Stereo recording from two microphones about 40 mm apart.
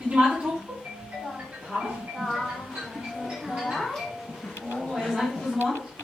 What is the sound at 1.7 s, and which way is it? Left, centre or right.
Music, centre.